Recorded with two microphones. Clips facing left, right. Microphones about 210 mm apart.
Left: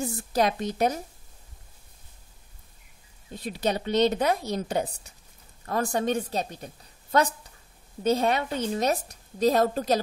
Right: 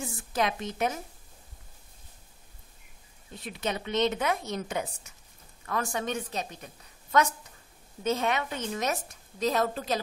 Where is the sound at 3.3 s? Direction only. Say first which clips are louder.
Left 5 dB; 35° left (ahead or behind).